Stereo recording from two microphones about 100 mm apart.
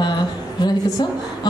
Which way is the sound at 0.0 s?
45° left (ahead or behind).